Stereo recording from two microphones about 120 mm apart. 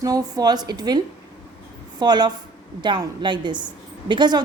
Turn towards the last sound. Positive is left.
turn(degrees=-40)  # may be behind; listen again after turning